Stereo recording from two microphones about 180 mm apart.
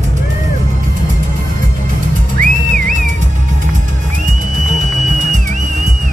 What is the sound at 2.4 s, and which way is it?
Music, 50° right (ahead or behind).